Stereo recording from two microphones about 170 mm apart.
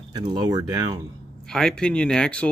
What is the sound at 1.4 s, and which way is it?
Speech, 5° left (ahead or behind).